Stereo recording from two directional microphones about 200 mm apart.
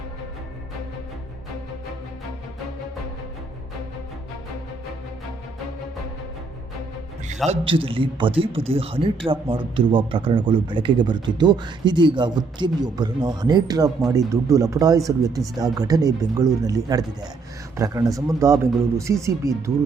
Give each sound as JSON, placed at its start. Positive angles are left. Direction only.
{"t": 7.4, "sound": "speech", "side_deg": -30}